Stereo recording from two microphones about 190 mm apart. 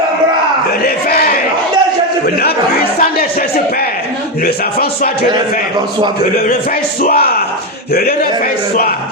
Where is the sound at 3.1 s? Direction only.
55° left (ahead or behind).